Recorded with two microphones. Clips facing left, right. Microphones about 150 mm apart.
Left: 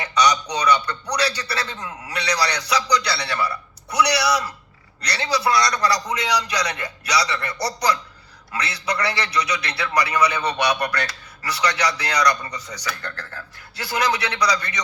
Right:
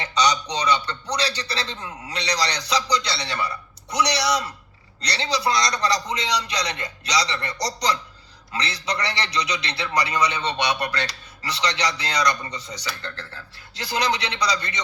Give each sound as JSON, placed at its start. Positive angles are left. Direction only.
{"t": 0.0, "sound": "a man's voice", "side_deg": -30}